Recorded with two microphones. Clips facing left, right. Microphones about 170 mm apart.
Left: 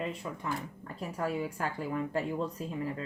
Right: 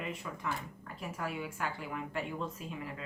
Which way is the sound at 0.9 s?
35° left (ahead or behind).